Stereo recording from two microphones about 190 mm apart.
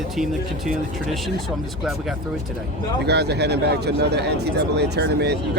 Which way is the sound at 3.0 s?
60° right (ahead or behind).